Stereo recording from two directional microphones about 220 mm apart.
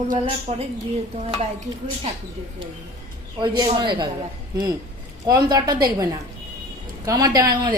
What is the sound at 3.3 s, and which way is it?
Stir, 20° right (ahead or behind).